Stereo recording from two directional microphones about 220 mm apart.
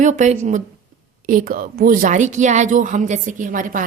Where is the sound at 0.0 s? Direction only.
35° right (ahead or behind).